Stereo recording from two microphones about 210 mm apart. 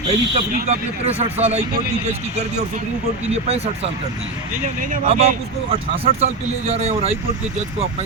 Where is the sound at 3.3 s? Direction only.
30° right (ahead or behind).